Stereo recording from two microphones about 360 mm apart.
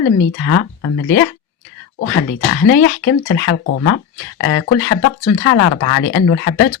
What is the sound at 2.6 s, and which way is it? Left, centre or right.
Speech, left.